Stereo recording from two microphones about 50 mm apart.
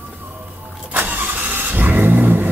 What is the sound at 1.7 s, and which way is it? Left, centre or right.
Vehicle, right.